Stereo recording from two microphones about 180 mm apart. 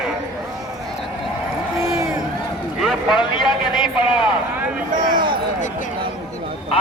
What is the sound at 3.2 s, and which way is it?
Speech, 25° left (ahead or behind).